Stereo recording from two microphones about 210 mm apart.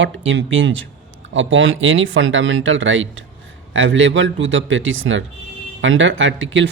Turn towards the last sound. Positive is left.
turn(degrees=-65)  # may be behind; listen again after turning